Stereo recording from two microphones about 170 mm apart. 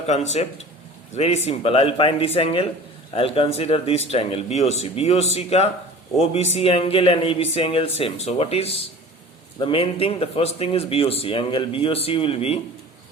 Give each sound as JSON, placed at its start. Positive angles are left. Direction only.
{"t": 0.1, "sound": "a man's voice", "side_deg": 40}